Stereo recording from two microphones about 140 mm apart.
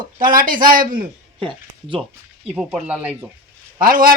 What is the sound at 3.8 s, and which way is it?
Speech, 90° right.